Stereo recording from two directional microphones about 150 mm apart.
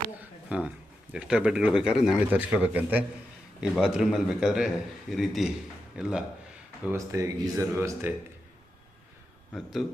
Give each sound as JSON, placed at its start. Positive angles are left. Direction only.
{"t": 0.2, "sound": "a sound", "side_deg": -10}
{"t": 1.1, "sound": "a man's voice", "side_deg": -5}
{"t": 6.9, "sound": "speech", "side_deg": -20}
{"t": 9.5, "sound": "a man's voice", "side_deg": 0}